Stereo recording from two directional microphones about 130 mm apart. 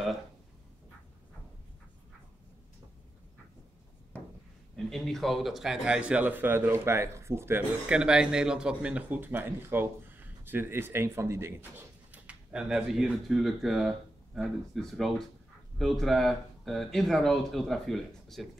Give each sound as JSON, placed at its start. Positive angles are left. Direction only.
{"t": 4.7, "sound": "speech", "side_deg": 5}
{"t": 7.9, "sound": "speech", "side_deg": -5}